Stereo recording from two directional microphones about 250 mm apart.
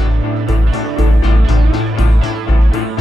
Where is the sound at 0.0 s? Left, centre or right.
Centre.